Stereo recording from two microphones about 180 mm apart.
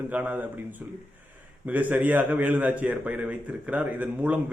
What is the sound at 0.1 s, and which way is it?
Speech, 10° right (ahead or behind).